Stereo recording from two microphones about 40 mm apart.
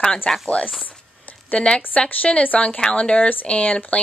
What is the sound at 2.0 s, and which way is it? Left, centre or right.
A woman's voice, left.